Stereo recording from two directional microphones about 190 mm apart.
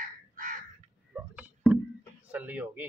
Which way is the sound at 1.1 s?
10° right (ahead or behind).